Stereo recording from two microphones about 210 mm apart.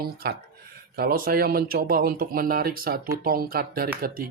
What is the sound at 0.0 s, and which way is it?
Speech, 50° right (ahead or behind).